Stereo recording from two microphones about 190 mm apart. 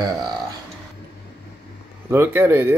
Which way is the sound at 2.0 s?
10° right (ahead or behind).